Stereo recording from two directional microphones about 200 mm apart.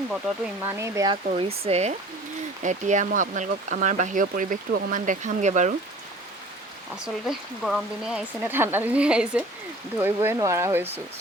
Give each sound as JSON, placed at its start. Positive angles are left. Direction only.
{"t": 0.6, "sound": "speech", "side_deg": -15}
{"t": 6.9, "sound": "speech", "side_deg": -5}